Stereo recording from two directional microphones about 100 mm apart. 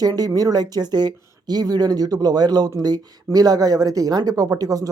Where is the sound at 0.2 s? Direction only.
40° right (ahead or behind).